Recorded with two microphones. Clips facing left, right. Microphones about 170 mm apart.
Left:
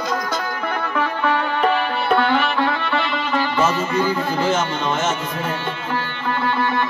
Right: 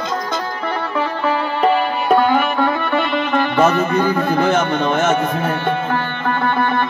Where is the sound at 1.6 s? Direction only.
45° right (ahead or behind); by 5.1 s 60° right (ahead or behind).